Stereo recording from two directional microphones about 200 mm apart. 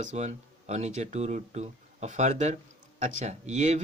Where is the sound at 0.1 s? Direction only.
35° right (ahead or behind).